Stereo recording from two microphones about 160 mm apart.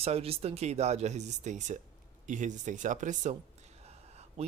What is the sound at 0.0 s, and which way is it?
Speech, 40° right (ahead or behind).